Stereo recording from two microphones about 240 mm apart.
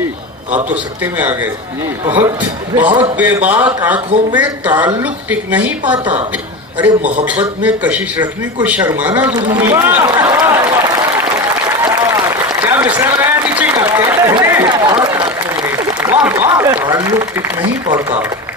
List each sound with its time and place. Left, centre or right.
1.1 s a woman's voice: centre
7.6 s a man's voice: centre
11.8 s applause: centre
15.1 s a sound: centre